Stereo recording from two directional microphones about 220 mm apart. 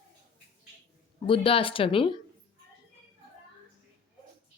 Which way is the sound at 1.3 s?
25° left (ahead or behind).